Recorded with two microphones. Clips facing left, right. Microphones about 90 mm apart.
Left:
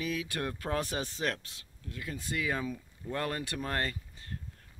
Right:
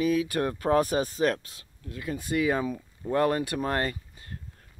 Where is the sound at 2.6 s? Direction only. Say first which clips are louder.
Right 6 dB; 45° right (ahead or behind).